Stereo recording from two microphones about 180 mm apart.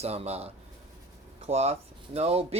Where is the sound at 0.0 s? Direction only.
35° right (ahead or behind).